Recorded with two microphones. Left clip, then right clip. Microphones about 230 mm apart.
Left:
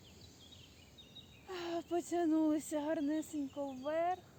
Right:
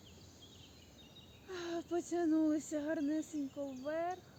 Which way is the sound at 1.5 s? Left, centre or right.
Left.